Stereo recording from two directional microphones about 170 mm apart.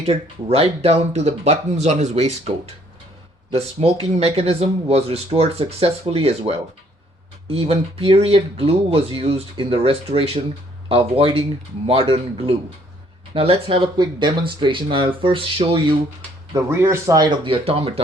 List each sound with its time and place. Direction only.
0.5 s speech: 35° right (ahead or behind)
16.5 s speech: 15° right (ahead or behind); by 18.0 s 35° right (ahead or behind)